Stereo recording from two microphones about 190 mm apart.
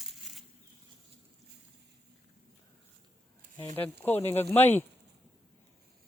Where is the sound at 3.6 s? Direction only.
10° left (ahead or behind).